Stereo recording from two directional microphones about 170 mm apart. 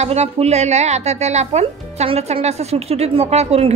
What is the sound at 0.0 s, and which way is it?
Speech, 40° right (ahead or behind).